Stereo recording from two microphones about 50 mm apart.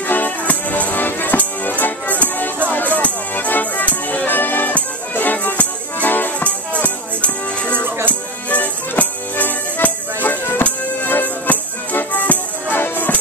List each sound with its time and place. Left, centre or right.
0.0 s music: left
6.7 s music: left
7.7 s music: right
8.1 s music: left